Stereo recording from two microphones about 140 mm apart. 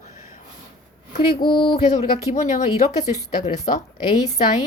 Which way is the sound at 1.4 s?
35° left (ahead or behind).